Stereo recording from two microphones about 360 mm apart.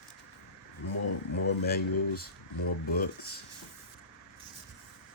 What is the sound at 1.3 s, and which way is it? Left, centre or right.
Speech, left.